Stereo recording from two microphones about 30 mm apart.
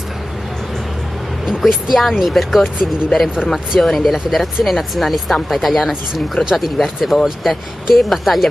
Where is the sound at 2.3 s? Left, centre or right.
Centre.